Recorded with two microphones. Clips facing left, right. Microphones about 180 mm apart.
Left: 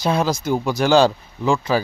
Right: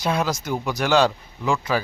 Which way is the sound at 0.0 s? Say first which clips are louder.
Left 4 dB; 30° left (ahead or behind).